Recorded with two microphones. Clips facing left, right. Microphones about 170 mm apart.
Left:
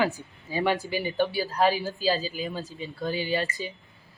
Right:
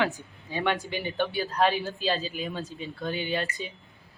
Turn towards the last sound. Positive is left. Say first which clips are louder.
# left 2 dB
turn(degrees=0)  # may be behind; listen again after turning